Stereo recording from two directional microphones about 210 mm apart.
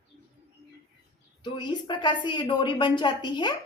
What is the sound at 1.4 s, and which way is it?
Speech, 20° left (ahead or behind).